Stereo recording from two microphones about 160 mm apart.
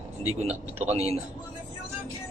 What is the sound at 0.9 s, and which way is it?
Speech, 40° right (ahead or behind).